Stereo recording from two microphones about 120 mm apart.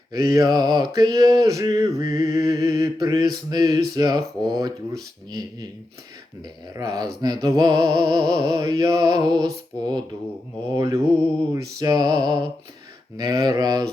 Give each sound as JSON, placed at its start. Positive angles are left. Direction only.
{"t": 0.1, "sound": "mantra", "side_deg": -30}
{"t": 6.7, "sound": "music", "side_deg": -30}
{"t": 10.8, "sound": "mantra", "side_deg": -25}
{"t": 11.5, "sound": "music", "side_deg": -30}